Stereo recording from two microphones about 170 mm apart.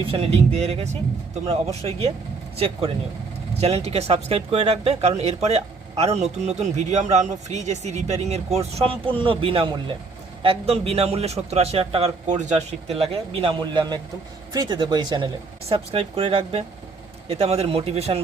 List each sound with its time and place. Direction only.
0.0 s speech: 35° right (ahead or behind)